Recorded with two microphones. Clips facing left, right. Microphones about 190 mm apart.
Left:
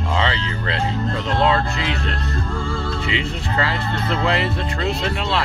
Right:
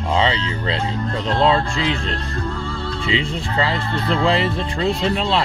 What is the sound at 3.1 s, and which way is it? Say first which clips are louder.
Speech: right 2 dB; 25° right (ahead or behind).